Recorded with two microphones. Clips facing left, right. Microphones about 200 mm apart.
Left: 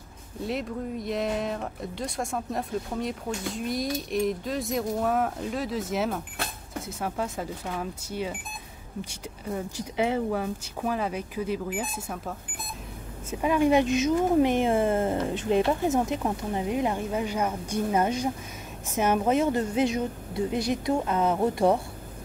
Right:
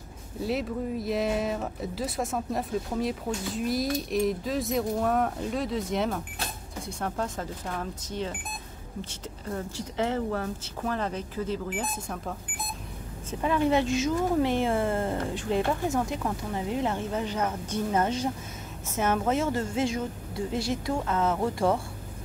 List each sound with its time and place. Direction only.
0.4 s a woman's voice: centre (ahead or behind)
9.5 s a woman's voice: 10° left (ahead or behind)